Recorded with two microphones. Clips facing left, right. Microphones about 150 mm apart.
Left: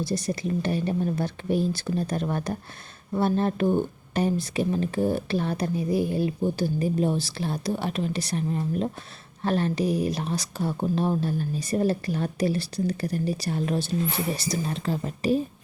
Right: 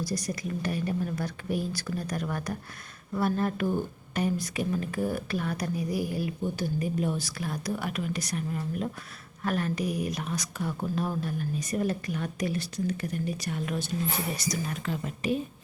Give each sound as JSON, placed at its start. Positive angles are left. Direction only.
{"t": 0.0, "sound": "speech", "side_deg": 25}